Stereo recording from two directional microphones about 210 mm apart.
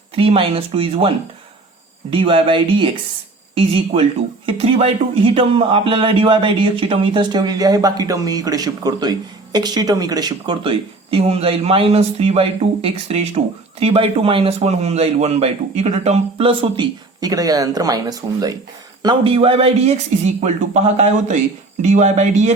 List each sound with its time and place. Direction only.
0.2 s speech: 25° right (ahead or behind)